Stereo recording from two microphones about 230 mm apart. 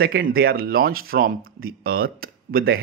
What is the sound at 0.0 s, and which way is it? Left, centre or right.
Speech, right.